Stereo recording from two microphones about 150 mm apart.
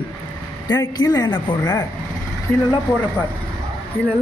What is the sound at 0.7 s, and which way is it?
A woman's voice, 25° left (ahead or behind).